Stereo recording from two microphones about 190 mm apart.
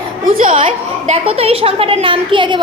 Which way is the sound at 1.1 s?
30° right (ahead or behind).